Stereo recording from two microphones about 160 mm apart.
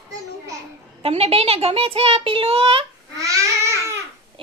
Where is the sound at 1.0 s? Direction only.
40° right (ahead or behind).